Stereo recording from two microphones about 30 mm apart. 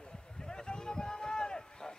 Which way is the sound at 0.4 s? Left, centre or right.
Left.